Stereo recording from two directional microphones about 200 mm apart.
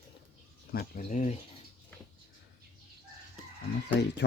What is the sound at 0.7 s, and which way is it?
Speech, 45° left (ahead or behind).